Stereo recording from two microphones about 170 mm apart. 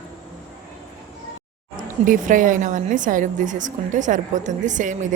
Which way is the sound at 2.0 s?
50° right (ahead or behind).